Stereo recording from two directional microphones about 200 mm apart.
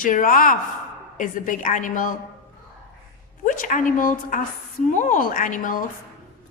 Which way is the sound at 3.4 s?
40° left (ahead or behind).